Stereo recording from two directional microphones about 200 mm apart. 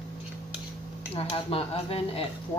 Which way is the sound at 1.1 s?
30° left (ahead or behind).